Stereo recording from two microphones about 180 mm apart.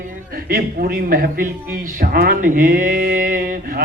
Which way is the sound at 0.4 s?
55° right (ahead or behind).